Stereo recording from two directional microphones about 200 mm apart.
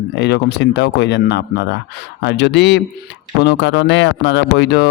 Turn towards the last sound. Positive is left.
turn(degrees=60)  # may be behind; listen again after turning